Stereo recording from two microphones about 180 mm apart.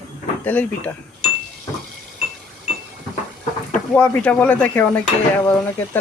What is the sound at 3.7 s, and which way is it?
Dishes, 10° left (ahead or behind).